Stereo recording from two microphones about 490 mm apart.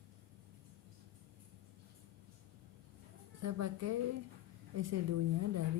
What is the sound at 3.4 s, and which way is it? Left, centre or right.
A woman's voice, right.